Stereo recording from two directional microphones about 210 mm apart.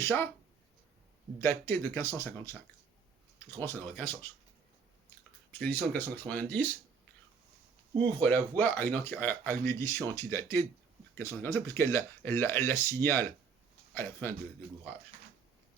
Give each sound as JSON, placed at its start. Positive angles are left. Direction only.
{"t": 0.0, "sound": "speech", "side_deg": 10}
{"t": 1.4, "sound": "speech", "side_deg": 10}
{"t": 3.6, "sound": "speech", "side_deg": 10}
{"t": 5.5, "sound": "speech", "side_deg": 10}
{"t": 8.2, "sound": "speech", "side_deg": 10}